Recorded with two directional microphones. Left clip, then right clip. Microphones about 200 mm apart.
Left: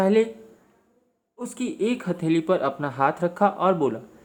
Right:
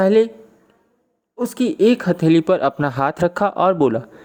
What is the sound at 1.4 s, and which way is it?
Speech, 35° right (ahead or behind).